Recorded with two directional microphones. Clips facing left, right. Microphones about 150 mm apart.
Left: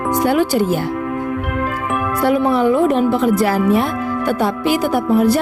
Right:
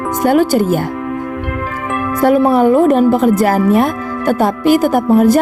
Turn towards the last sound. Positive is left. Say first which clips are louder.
# right 4 dB
turn(degrees=-45)  # may be behind; listen again after turning